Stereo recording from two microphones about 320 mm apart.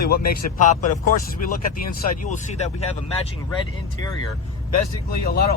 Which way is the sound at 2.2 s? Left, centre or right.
Left.